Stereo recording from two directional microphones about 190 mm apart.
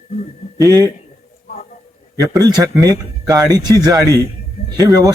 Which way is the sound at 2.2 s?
20° right (ahead or behind).